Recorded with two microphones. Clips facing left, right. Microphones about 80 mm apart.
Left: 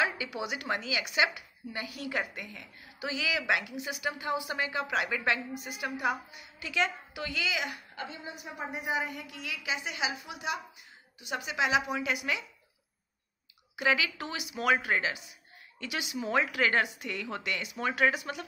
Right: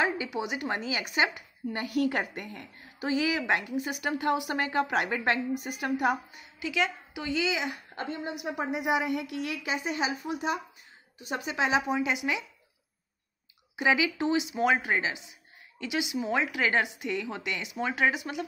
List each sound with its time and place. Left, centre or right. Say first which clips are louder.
0.0 s speech: right 3 dB; right
4.2 s a woman's voice: right 6 dB; right
6.6 s a woman's voice: right 2 dB; centre
7.2 s speech: right 5 dB; right
7.9 s a woman's voice: right 6 dB; right
8.3 s a woman's voice: right 7 dB; right
13.7 s a woman's voice: right 3 dB; centre